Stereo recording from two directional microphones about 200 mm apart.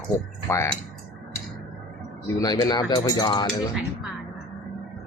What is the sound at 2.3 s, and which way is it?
Speech, 20° left (ahead or behind).